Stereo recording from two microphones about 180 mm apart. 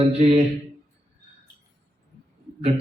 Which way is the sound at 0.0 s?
35° right (ahead or behind).